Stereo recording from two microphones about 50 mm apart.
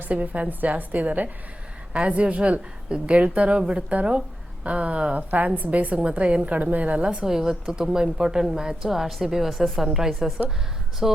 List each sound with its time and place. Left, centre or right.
0.0 s a woman's voice: right
7.3 s speech: centre